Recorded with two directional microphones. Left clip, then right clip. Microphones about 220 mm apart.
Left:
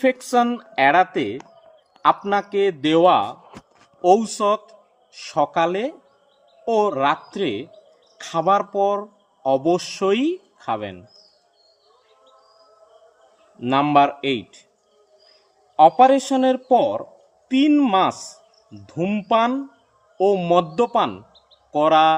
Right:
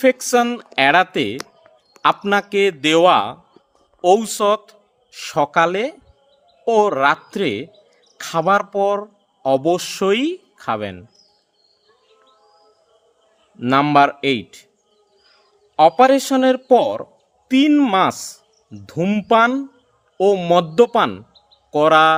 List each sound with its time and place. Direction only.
0.0 s speech: 55° right (ahead or behind)
13.6 s speech: 50° right (ahead or behind)
15.7 s speech: 50° right (ahead or behind)